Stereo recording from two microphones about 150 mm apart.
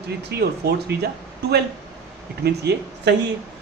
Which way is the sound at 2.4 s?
90° right.